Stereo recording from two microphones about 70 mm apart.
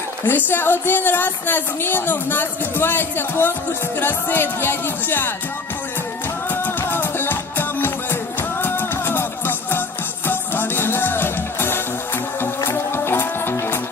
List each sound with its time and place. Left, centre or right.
0.3 s speech: left
6.5 s music: left